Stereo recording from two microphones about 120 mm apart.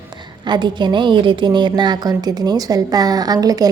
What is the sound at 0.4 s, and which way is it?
A woman's voice, 40° right (ahead or behind).